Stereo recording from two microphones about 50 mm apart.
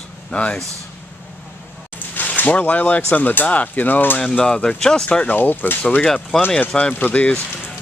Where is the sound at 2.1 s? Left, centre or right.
Left.